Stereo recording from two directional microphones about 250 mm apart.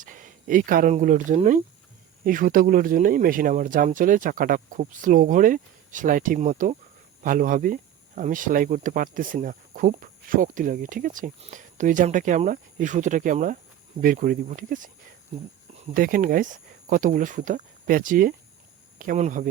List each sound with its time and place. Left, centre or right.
0.0 s speech: right
16.0 s speech: right